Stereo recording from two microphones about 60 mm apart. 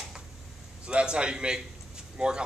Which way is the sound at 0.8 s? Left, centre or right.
Centre.